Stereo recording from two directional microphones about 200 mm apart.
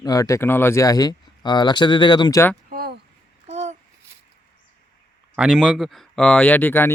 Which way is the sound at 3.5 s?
35° right (ahead or behind).